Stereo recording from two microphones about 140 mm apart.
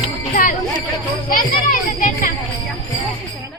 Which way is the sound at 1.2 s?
90° left.